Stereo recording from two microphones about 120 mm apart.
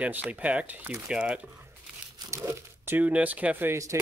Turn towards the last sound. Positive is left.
turn(degrees=-25)  # may be behind; listen again after turning